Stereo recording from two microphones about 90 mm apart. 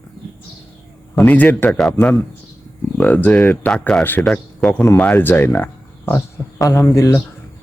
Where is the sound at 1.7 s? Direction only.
5° left (ahead or behind).